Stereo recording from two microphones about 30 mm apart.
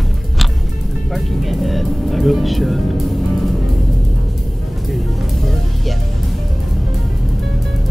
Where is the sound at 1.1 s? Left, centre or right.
Centre.